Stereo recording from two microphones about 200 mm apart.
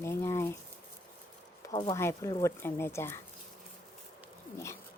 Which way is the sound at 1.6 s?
20° left (ahead or behind).